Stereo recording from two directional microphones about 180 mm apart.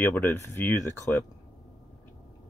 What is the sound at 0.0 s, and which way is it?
Speech, 10° left (ahead or behind).